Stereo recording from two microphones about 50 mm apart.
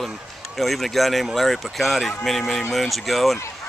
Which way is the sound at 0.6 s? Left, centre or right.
Centre.